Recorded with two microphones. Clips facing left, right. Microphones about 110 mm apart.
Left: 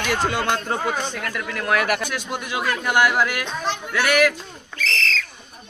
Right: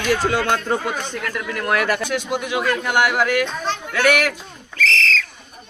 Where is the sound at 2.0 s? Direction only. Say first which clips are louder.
Right 5 dB; 20° right (ahead or behind).